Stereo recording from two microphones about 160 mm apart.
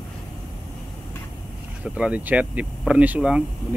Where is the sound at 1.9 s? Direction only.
10° right (ahead or behind).